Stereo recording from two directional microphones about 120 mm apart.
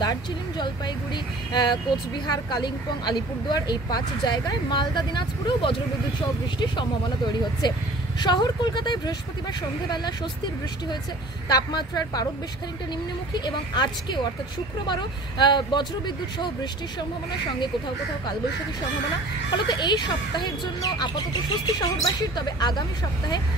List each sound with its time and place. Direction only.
0.0 s speech: 35° left (ahead or behind)
7.6 s speech: 40° left (ahead or behind)
11.4 s speech: 35° left (ahead or behind)
13.3 s speech: 40° left (ahead or behind)
19.7 s speech: 40° left (ahead or behind)